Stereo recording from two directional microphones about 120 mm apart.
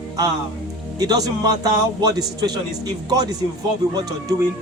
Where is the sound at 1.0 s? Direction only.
30° right (ahead or behind).